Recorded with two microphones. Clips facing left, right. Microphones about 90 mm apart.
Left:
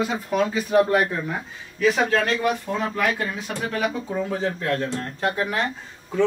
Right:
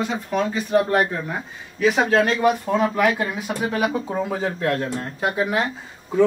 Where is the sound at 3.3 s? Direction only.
10° right (ahead or behind).